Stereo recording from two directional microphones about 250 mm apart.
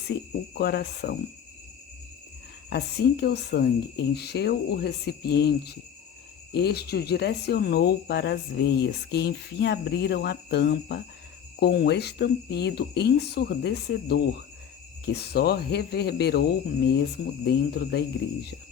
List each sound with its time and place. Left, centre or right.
0.1 s speech: left
2.6 s speech: left